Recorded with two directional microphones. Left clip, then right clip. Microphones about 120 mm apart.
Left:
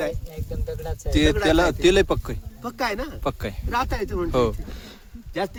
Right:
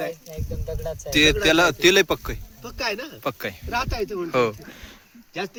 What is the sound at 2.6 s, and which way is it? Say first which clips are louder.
Speech: left 2 dB; 45° left (ahead or behind).